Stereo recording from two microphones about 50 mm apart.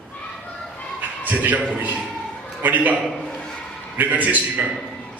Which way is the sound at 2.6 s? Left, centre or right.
Right.